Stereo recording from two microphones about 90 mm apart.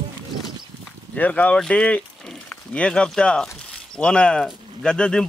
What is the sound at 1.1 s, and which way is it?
Speech, 15° left (ahead or behind).